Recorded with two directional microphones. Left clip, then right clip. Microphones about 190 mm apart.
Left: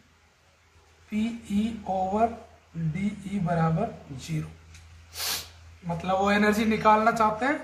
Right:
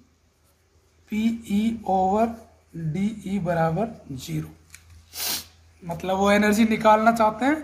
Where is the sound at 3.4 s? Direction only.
40° right (ahead or behind).